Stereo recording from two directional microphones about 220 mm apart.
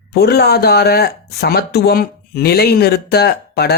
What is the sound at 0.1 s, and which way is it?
Speech, 45° left (ahead or behind).